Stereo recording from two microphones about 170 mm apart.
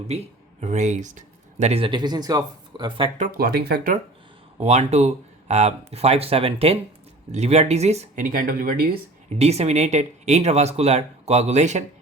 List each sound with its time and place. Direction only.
0.6 s speech: 40° right (ahead or behind); by 3.1 s 25° right (ahead or behind)
3.2 s speech: 55° right (ahead or behind)
4.6 s speech: 40° right (ahead or behind); by 9.0 s 60° right (ahead or behind)
9.3 s speech: 40° right (ahead or behind)